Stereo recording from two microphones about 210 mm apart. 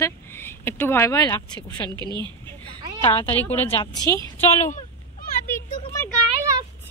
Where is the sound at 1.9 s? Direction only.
20° right (ahead or behind).